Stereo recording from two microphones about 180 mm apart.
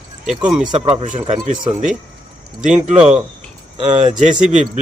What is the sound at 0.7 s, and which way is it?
Speech, 40° right (ahead or behind).